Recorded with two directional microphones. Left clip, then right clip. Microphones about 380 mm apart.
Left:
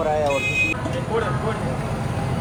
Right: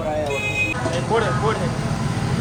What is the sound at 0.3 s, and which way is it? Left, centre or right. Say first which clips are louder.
Vehicle: left 2 dB; centre.